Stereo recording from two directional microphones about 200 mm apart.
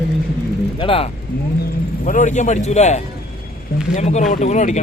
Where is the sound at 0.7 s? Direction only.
25° left (ahead or behind).